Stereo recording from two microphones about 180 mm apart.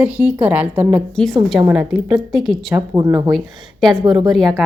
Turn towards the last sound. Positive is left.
turn(degrees=0)  # may be behind; listen again after turning